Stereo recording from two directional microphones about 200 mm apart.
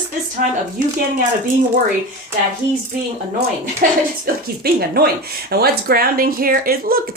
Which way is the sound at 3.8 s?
45° right (ahead or behind).